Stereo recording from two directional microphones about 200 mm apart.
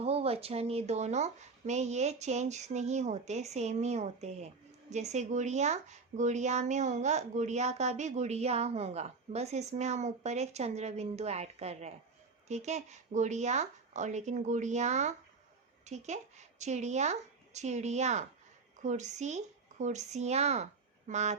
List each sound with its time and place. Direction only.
0.0 s speech: 30° right (ahead or behind)